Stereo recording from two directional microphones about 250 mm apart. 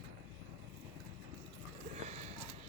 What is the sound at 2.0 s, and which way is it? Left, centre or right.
Sniff, right.